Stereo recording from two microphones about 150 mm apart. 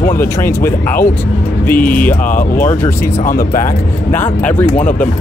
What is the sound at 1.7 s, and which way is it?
Speech, 70° left (ahead or behind).